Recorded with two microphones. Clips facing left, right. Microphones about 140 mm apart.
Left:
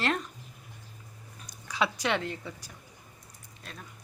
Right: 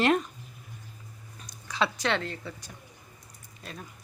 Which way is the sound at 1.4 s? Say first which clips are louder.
Right 1 dB; 10° left (ahead or behind).